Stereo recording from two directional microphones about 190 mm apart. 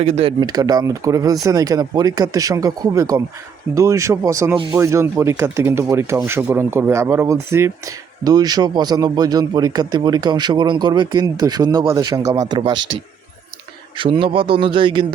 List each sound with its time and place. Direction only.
0.0 s speech: 35° right (ahead or behind)
13.9 s speech: 25° right (ahead or behind)